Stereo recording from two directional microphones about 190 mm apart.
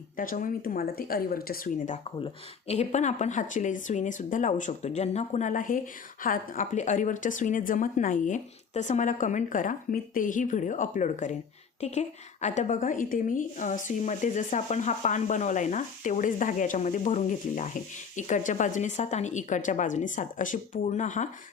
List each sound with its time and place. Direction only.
0.2 s speech: 45° left (ahead or behind)
2.1 s speech: 30° left (ahead or behind)